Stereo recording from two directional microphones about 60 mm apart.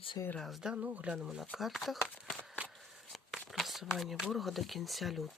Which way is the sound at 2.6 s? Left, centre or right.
Centre.